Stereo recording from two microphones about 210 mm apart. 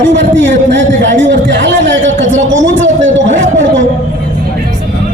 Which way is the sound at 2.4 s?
65° right (ahead or behind).